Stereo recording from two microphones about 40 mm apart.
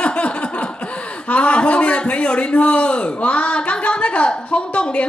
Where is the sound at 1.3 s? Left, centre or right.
Left.